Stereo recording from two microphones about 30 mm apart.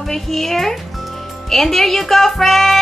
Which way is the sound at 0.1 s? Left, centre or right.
Centre.